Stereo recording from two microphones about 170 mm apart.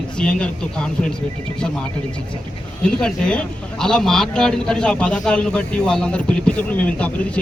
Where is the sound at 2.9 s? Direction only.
5° left (ahead or behind).